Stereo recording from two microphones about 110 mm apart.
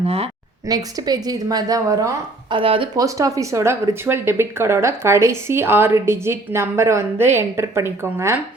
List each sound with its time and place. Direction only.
0.0 s speech: 65° right (ahead or behind)
0.7 s a woman's voice: 35° right (ahead or behind)
2.5 s speech: 55° right (ahead or behind)
2.9 s speech: 30° right (ahead or behind)